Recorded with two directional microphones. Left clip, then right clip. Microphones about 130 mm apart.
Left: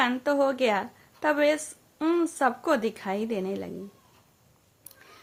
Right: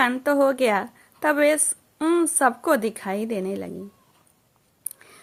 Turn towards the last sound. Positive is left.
turn(degrees=-25)  # may be behind; listen again after turning